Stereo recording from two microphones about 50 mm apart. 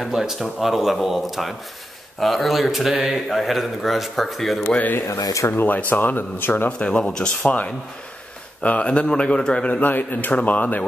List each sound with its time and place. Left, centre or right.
0.0 s speech: centre
4.6 s speech: left
5.0 s speech: left
5.5 s speech: left
6.8 s a man's voice: centre
7.4 s a man's voice: left
9.7 s speech: left